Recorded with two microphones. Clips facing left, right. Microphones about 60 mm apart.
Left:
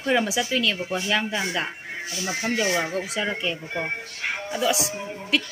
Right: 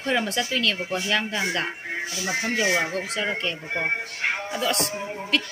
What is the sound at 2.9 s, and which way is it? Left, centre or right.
Speech, centre.